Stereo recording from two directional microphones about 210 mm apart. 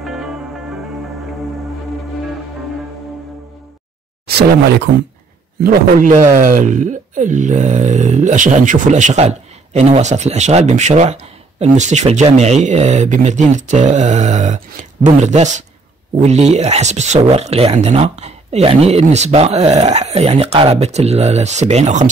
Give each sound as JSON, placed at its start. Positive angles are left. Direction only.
{"t": 0.0, "sound": "music", "side_deg": 0}
{"t": 4.3, "sound": "a man's voice", "side_deg": -50}